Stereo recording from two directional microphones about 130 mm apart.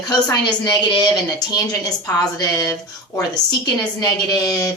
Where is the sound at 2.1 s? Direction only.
30° left (ahead or behind).